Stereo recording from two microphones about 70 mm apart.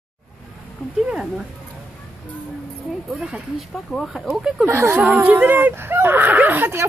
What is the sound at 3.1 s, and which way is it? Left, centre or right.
Speech, centre.